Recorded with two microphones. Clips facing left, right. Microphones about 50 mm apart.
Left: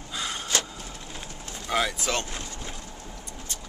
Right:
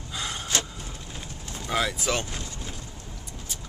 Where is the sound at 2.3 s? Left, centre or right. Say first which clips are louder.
Even; left.